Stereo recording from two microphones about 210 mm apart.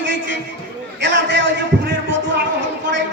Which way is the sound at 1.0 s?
60° right (ahead or behind).